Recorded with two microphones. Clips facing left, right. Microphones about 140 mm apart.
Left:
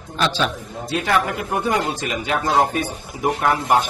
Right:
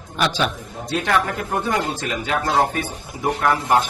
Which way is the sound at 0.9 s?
5° left (ahead or behind).